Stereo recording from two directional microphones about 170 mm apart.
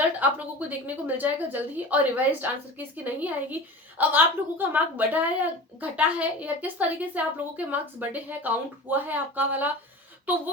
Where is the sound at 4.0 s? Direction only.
10° right (ahead or behind).